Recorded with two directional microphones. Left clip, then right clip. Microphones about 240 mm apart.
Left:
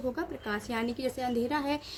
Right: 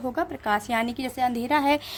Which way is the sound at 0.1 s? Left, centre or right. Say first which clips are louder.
Right 9 dB; right.